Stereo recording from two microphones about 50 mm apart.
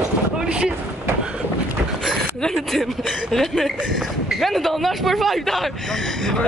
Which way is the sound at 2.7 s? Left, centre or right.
Centre.